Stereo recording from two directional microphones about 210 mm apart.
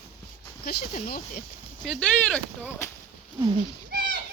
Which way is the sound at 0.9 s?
45° left (ahead or behind).